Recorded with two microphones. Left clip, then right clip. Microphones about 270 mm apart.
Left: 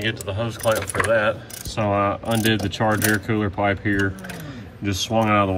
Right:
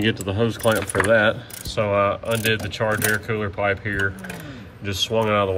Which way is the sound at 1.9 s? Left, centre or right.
Centre.